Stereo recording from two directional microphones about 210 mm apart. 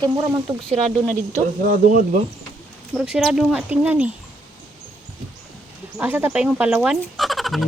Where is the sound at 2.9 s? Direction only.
5° right (ahead or behind).